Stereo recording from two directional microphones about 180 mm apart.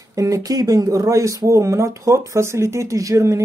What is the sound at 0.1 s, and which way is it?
Speech, 20° right (ahead or behind).